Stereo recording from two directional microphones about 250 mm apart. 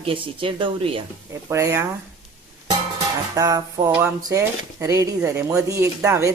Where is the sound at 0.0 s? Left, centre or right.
Right.